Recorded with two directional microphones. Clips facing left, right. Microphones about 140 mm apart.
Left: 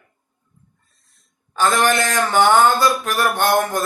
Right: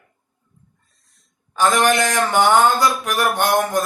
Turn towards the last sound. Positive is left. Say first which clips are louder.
# even
turn(degrees=-15)  # may be behind; listen again after turning